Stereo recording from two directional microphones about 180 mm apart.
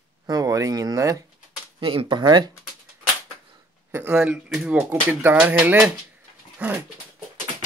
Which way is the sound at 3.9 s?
10° right (ahead or behind).